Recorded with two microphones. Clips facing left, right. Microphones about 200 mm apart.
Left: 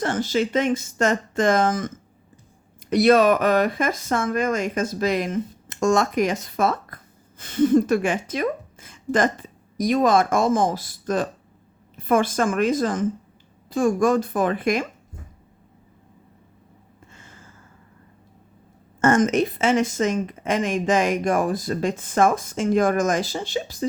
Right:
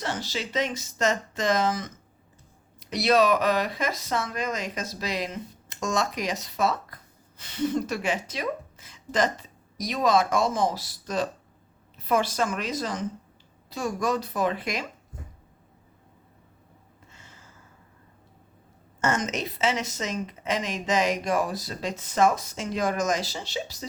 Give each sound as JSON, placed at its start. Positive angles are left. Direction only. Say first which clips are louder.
{"t": 0.0, "sound": "speech", "louder": "left 9 dB", "side_deg": 50}
{"t": 2.9, "sound": "speech", "louder": "left 6 dB", "side_deg": 50}
{"t": 17.1, "sound": "a sound", "louder": "left 4 dB", "side_deg": 50}
{"t": 19.0, "sound": "speech", "louder": "left 9 dB", "side_deg": 50}